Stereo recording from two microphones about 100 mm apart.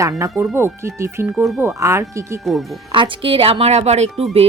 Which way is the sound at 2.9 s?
60° right (ahead or behind).